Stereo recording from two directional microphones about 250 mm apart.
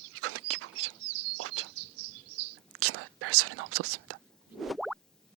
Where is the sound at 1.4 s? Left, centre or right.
Right.